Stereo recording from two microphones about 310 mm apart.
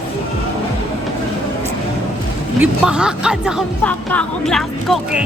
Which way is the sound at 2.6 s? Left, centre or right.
Centre.